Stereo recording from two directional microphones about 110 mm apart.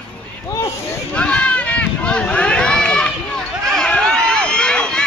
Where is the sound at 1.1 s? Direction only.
10° left (ahead or behind).